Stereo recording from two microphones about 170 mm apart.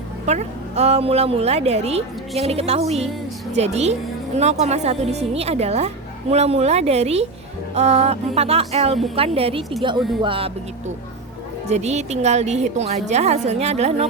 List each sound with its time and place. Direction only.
0.3 s a woman's voice: 40° right (ahead or behind)
11.7 s a woman's voice: 40° right (ahead or behind)